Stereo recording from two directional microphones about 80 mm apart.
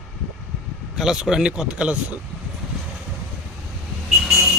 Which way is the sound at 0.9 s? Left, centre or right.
Centre.